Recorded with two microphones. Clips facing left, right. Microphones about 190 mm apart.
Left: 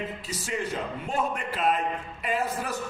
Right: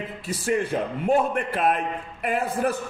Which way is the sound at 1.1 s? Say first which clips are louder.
Right 9 dB; 55° right (ahead or behind).